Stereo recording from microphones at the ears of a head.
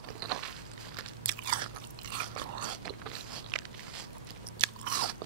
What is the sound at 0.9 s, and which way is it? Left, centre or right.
Biting, right.